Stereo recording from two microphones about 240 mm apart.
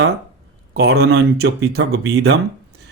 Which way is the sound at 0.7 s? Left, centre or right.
Right.